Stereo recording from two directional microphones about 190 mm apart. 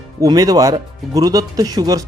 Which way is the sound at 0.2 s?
20° right (ahead or behind).